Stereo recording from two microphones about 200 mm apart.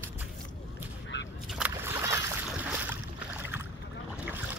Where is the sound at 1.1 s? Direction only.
65° left (ahead or behind).